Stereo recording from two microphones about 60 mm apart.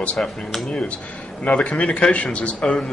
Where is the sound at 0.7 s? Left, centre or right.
Centre.